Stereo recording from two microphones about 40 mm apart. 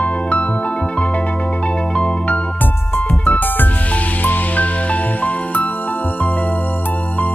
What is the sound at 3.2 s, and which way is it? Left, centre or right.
Music, left.